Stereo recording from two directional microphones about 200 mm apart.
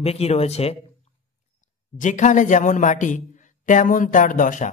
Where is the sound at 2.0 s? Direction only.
35° left (ahead or behind).